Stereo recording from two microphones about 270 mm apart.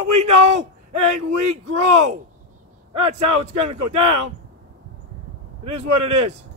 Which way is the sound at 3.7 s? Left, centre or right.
Right.